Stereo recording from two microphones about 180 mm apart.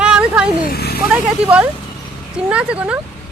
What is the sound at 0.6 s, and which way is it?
Speech, 60° left (ahead or behind).